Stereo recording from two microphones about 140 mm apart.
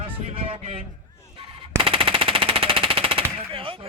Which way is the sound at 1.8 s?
40° right (ahead or behind).